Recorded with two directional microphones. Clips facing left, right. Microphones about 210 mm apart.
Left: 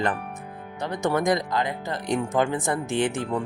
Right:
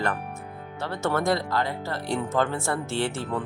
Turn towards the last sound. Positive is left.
turn(degrees=15)  # may be behind; listen again after turning